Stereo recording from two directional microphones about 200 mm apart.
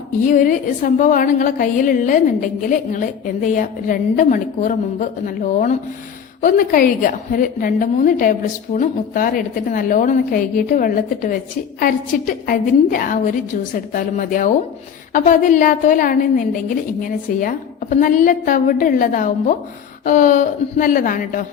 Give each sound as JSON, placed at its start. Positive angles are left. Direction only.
{"t": 0.2, "sound": "a woman's voice", "side_deg": 40}
{"t": 3.4, "sound": "a woman's voice", "side_deg": 40}